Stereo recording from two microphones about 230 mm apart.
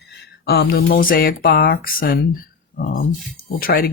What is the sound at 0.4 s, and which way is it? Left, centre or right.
A woman's voice, left.